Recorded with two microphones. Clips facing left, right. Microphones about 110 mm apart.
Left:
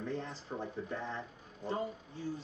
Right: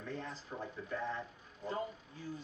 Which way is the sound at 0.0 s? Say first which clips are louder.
Left 4 dB; 30° left (ahead or behind).